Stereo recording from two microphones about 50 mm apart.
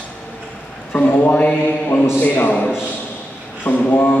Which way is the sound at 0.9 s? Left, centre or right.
Left.